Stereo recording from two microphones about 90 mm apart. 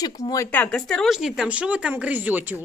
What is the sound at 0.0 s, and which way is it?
Speech, 40° left (ahead or behind).